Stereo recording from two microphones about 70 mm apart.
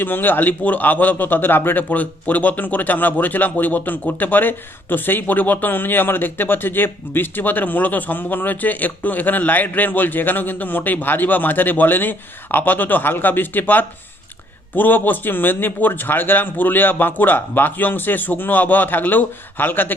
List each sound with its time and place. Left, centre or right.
0.0 s a man's voice: left